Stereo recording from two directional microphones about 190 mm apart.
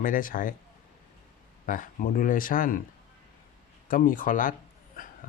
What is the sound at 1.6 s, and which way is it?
Speech, 45° left (ahead or behind).